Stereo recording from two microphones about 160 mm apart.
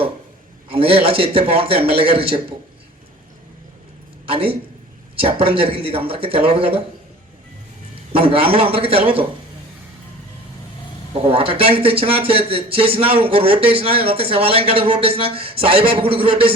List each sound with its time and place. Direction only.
0.7 s speech: 35° right (ahead or behind)
4.3 s speech: 35° right (ahead or behind)
8.1 s speech: 35° right (ahead or behind)
11.2 s speech: 35° right (ahead or behind)